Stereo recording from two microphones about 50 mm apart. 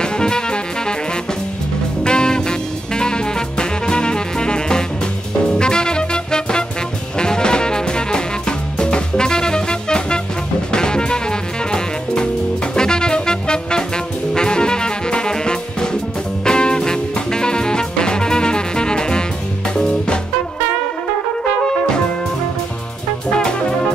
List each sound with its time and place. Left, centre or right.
0.0 s music: centre
2.0 s music: centre